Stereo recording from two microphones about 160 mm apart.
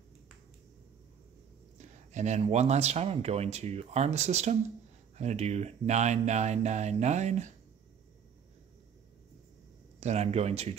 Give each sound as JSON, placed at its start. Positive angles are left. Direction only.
{"t": 1.8, "sound": "speech", "side_deg": -45}
{"t": 9.9, "sound": "speech", "side_deg": -40}